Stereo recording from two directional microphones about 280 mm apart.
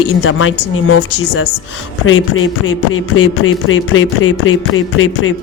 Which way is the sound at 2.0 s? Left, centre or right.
Left.